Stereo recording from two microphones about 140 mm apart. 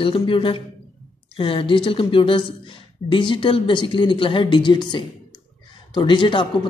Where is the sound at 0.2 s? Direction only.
40° left (ahead or behind).